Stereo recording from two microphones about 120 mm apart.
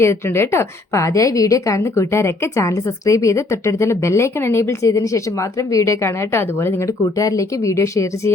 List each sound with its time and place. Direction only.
0.0 s a woman's voice: 20° left (ahead or behind)